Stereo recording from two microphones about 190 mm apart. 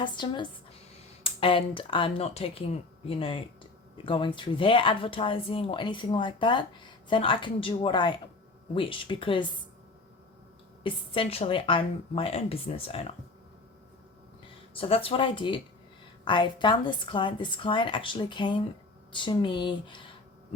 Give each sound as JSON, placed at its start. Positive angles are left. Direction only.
{"t": 0.0, "sound": "speech", "side_deg": 25}
{"t": 10.8, "sound": "speech", "side_deg": 30}
{"t": 14.8, "sound": "speech", "side_deg": 30}